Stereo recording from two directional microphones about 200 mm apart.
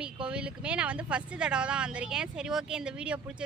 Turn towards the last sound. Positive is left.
turn(degrees=-5)  # may be behind; listen again after turning